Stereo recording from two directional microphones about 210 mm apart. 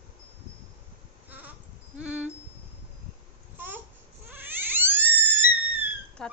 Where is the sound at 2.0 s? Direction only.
5° right (ahead or behind).